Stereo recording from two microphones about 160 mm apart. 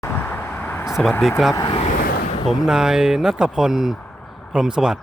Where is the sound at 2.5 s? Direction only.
5° right (ahead or behind).